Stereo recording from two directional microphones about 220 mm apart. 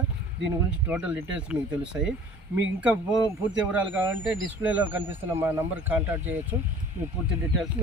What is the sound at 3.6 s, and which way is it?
Speech, 5° right (ahead or behind).